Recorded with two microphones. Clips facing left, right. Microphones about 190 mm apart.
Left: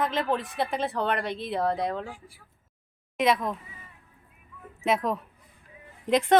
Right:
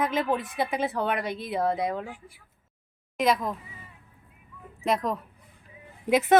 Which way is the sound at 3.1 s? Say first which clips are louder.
Even; centre (ahead or behind).